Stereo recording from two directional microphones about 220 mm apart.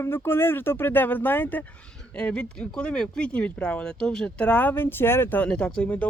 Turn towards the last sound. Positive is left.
turn(degrees=5)  # may be behind; listen again after turning